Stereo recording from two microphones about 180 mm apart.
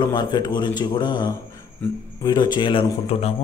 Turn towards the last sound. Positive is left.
turn(degrees=30)  # may be behind; listen again after turning